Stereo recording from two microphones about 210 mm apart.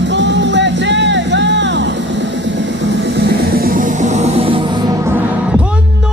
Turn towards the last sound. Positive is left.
turn(degrees=-25)  # may be behind; listen again after turning